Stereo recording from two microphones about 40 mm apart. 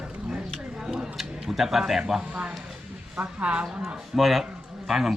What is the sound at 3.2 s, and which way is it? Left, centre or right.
Speech, right.